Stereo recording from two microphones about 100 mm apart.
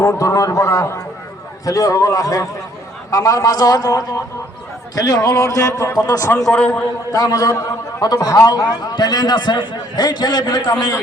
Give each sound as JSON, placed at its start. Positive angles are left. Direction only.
{"t": 0.0, "sound": "a man's voice", "side_deg": 30}
{"t": 6.4, "sound": "a man's voice", "side_deg": 10}
{"t": 7.1, "sound": "a man's voice", "side_deg": 35}